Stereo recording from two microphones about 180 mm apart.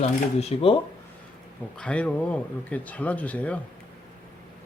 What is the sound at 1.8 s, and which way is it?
Speech, 5° left (ahead or behind).